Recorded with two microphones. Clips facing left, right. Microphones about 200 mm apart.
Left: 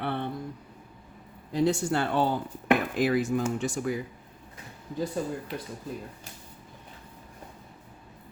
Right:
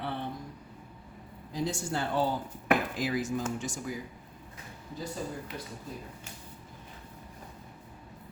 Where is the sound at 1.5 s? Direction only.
65° left (ahead or behind).